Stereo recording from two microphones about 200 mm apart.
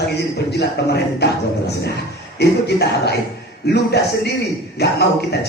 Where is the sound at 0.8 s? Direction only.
55° left (ahead or behind).